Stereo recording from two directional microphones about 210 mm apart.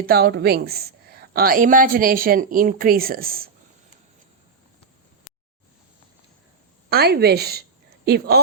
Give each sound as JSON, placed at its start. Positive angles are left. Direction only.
{"t": 0.0, "sound": "a woman's voice", "side_deg": -45}
{"t": 6.9, "sound": "a woman's voice", "side_deg": -50}